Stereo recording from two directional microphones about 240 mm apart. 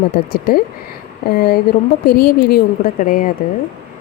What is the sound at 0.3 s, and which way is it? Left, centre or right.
Speech, left.